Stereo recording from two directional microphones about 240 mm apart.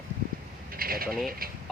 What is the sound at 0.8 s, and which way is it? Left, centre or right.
Speech, right.